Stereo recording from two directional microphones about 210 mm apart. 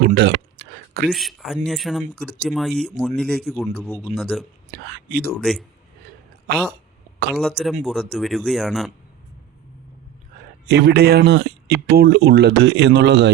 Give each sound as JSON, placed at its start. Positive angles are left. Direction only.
{"t": 0.0, "sound": "a sound", "side_deg": -55}
{"t": 1.0, "sound": "speech", "side_deg": 0}
{"t": 4.7, "sound": "speech", "side_deg": -50}
{"t": 5.3, "sound": "speech", "side_deg": 0}
{"t": 6.5, "sound": "speech", "side_deg": -50}
{"t": 7.3, "sound": "speech", "side_deg": 0}
{"t": 10.7, "sound": "speech", "side_deg": -50}